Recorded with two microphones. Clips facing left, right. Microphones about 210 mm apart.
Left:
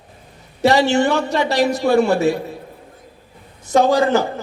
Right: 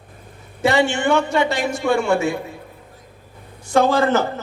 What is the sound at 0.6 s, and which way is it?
A man's voice, 35° left (ahead or behind).